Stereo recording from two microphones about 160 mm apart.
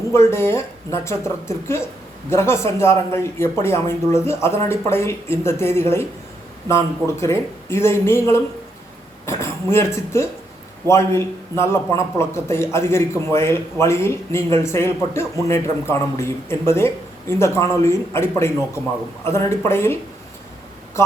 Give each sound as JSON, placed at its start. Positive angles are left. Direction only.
{"t": 0.1, "sound": "a man's voice", "side_deg": 15}